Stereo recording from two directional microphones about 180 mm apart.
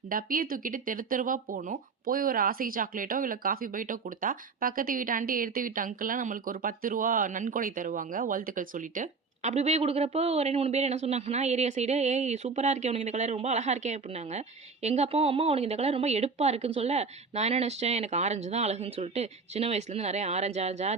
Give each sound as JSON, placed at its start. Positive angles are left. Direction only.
{"t": 0.1, "sound": "speech", "side_deg": -50}